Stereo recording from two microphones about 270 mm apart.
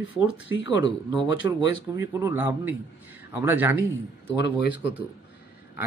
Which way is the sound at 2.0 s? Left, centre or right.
Centre.